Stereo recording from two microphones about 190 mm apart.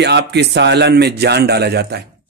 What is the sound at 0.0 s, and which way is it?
Speech, 60° right (ahead or behind).